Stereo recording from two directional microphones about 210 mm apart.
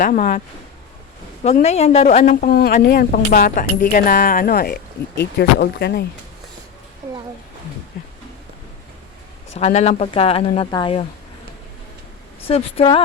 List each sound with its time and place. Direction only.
0.0 s speech: 40° left (ahead or behind)
1.5 s a woman's voice: 30° left (ahead or behind); by 6.1 s 50° left (ahead or behind)
9.6 s speech: 30° left (ahead or behind)
12.5 s speech: 25° left (ahead or behind)